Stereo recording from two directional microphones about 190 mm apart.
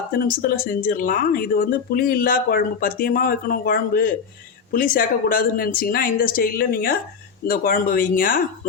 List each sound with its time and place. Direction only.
0.3 s speech: 45° left (ahead or behind)